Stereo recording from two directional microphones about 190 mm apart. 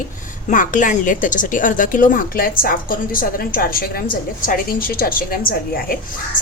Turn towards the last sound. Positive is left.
turn(degrees=50)  # may be behind; listen again after turning